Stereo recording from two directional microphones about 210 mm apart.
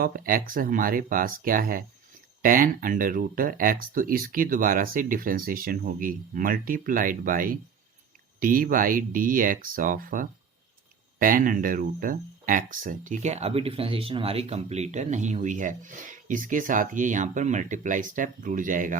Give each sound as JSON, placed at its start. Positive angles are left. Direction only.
{"t": 0.0, "sound": "speech", "side_deg": -45}